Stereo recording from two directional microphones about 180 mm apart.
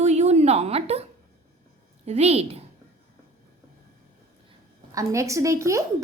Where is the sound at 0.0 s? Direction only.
40° right (ahead or behind).